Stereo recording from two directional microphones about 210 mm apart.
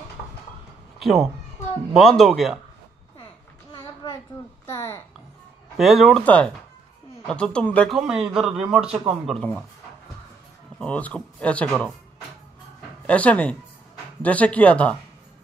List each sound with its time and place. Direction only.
0.9 s speech: centre (ahead or behind)
3.7 s a sound: 20° left (ahead or behind)
4.6 s speech: 10° left (ahead or behind)
5.8 s speech: centre (ahead or behind)
10.8 s speech: 5° left (ahead or behind)
13.0 s speech: 5° left (ahead or behind)